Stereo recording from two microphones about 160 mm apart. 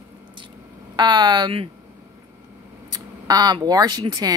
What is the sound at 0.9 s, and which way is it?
Speech, 30° right (ahead or behind).